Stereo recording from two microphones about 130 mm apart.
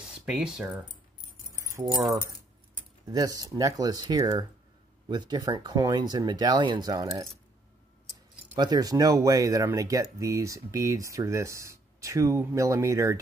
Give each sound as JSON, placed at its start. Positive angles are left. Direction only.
{"t": 0.0, "sound": "speech", "side_deg": -5}
{"t": 1.7, "sound": "speech", "side_deg": -25}
{"t": 3.1, "sound": "speech", "side_deg": -30}
{"t": 8.5, "sound": "speech", "side_deg": -30}